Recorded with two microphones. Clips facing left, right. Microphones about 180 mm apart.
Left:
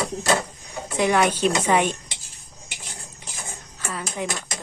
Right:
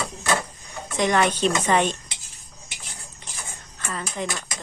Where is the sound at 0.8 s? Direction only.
10° left (ahead or behind).